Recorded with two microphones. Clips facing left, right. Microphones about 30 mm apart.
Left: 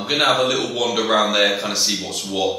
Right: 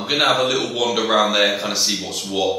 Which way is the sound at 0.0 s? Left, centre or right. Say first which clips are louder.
Even; centre.